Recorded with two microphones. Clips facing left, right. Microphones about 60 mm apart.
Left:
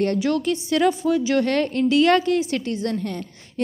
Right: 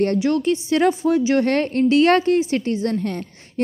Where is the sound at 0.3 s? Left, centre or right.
Right.